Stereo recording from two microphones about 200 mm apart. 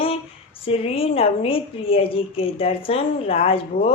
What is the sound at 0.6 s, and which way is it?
A woman's voice, 30° left (ahead or behind).